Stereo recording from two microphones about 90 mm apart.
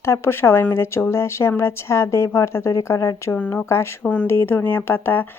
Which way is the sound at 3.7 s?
30° left (ahead or behind).